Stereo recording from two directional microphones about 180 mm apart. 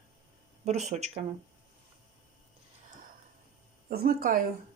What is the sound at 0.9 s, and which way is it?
Speech, 35° right (ahead or behind).